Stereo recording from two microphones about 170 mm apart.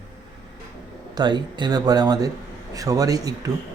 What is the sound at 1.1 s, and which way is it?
Speech, 25° right (ahead or behind).